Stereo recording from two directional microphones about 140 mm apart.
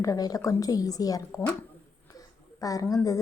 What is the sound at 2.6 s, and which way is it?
Speech, 25° left (ahead or behind).